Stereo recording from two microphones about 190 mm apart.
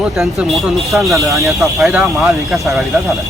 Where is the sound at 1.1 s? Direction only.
15° right (ahead or behind).